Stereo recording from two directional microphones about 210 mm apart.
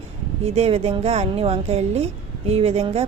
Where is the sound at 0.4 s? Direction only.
30° right (ahead or behind).